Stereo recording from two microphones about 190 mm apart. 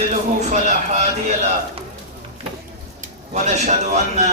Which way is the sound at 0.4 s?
35° right (ahead or behind).